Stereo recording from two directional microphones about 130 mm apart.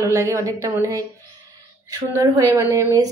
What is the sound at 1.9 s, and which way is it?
Speech, 25° right (ahead or behind).